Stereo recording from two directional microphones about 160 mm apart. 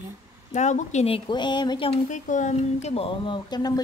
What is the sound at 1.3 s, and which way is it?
Speech, 30° left (ahead or behind).